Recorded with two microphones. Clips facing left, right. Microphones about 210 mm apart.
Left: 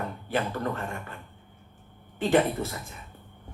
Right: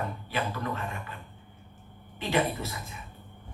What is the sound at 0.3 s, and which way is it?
Speech, 50° left (ahead or behind).